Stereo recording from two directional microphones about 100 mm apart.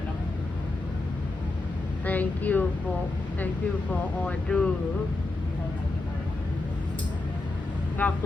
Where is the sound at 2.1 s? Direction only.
15° left (ahead or behind).